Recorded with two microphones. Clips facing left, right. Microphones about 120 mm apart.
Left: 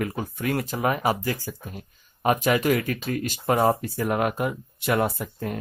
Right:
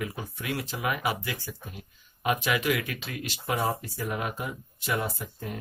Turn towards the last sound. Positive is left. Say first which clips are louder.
# left 6 dB
turn(degrees=60)  # may be behind; listen again after turning